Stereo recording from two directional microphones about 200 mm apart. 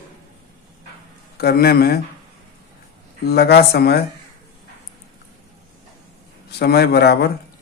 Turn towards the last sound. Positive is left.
turn(degrees=55)  # may be behind; listen again after turning